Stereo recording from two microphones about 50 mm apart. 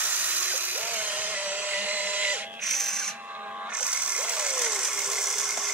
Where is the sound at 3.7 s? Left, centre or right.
Right; by 5.7 s centre.